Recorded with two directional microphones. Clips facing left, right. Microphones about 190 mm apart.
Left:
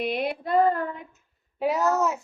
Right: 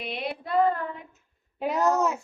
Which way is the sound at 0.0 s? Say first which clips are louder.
Left 6 dB; 45° left (ahead or behind).